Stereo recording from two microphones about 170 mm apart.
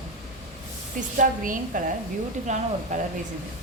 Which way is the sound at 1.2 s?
50° right (ahead or behind).